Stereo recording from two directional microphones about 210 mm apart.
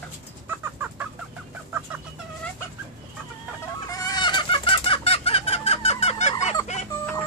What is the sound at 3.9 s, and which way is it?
Chicken, 15° left (ahead or behind).